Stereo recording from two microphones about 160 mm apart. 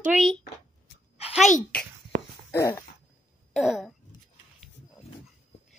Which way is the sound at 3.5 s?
Centre (ahead or behind).